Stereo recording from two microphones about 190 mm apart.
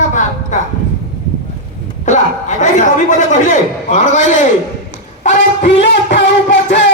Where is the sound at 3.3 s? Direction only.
40° left (ahead or behind).